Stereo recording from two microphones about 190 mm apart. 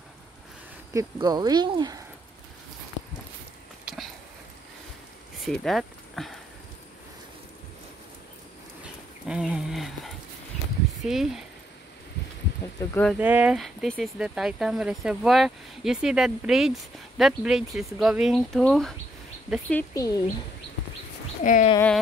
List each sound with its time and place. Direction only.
0.9 s speech: 20° right (ahead or behind)
3.8 s a sound: centre (ahead or behind)
5.4 s speech: centre (ahead or behind)
9.3 s a sound: 5° right (ahead or behind)
11.1 s speech: centre (ahead or behind)
12.9 s speech: 5° left (ahead or behind)
13.2 s speech: 10° right (ahead or behind)
19.7 s speech: 15° left (ahead or behind)
21.4 s speech: 40° left (ahead or behind)